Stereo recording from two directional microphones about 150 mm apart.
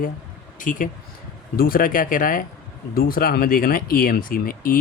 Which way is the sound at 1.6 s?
75° left (ahead or behind).